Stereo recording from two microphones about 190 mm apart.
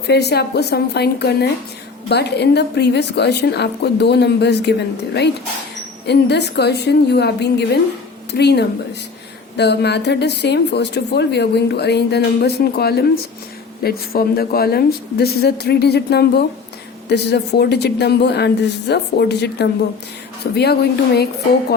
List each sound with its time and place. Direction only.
0.1 s a woman's voice: 60° left (ahead or behind)
6.1 s a woman's voice: 65° left (ahead or behind)